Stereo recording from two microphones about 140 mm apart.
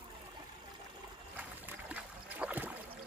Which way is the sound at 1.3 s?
15° right (ahead or behind).